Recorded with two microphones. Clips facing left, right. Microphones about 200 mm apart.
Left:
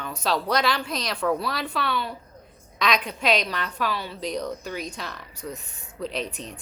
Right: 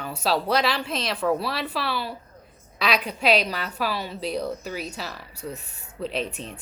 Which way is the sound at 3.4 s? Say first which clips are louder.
Even; 5° right (ahead or behind).